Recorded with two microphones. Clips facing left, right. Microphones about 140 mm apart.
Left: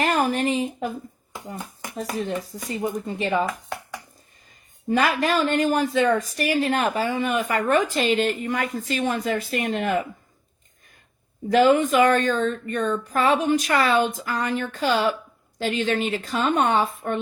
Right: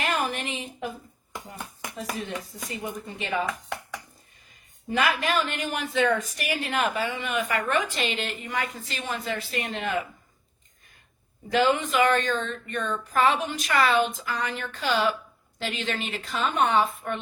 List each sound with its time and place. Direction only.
0.0 s a sound: 40° left (ahead or behind)
2.6 s a woman's voice: 40° left (ahead or behind)
4.9 s a woman's voice: 40° left (ahead or behind)
11.4 s speech: 45° left (ahead or behind)